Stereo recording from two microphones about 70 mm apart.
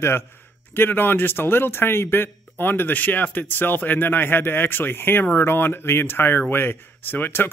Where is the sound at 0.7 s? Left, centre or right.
Left.